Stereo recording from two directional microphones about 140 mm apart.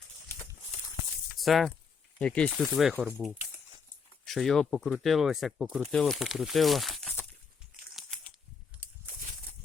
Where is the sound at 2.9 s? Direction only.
15° right (ahead or behind).